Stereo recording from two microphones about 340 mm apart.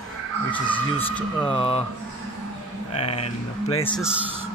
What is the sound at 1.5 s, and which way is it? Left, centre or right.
Speech, centre.